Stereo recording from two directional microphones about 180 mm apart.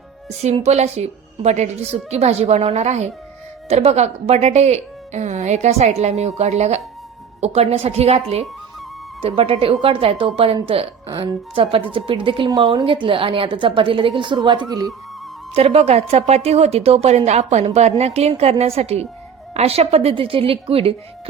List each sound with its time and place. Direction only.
0.4 s a woman's voice: 35° right (ahead or behind); by 14.9 s 20° right (ahead or behind)
15.5 s a woman's voice: 35° right (ahead or behind)